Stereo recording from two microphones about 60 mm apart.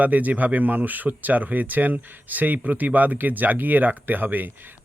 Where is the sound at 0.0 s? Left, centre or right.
Right.